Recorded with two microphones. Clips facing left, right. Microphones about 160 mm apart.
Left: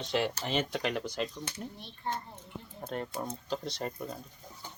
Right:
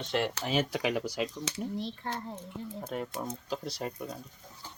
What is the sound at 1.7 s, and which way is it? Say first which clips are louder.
Speech: right 2 dB; 90° right.